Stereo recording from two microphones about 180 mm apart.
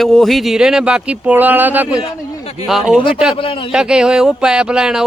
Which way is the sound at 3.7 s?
5° right (ahead or behind).